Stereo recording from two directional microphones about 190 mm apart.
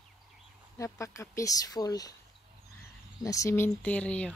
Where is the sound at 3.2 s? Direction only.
15° left (ahead or behind).